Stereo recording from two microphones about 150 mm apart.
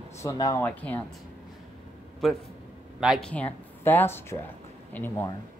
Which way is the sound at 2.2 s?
Centre (ahead or behind).